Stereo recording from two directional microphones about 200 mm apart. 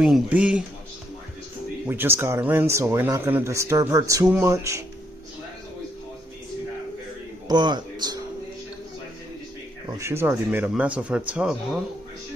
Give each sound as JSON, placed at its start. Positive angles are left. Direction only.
{"t": 0.0, "sound": "speech", "side_deg": -5}
{"t": 1.9, "sound": "speech", "side_deg": -10}
{"t": 7.4, "sound": "speech", "side_deg": -20}
{"t": 9.9, "sound": "speech", "side_deg": -15}